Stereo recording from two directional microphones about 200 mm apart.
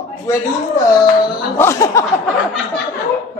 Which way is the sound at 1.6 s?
15° left (ahead or behind).